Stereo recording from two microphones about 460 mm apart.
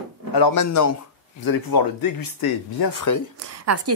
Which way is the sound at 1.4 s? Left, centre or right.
Left.